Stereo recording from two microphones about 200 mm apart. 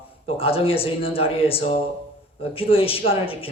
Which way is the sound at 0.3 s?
30° left (ahead or behind).